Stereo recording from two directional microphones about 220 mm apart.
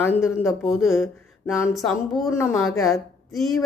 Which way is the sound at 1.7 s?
Centre (ahead or behind).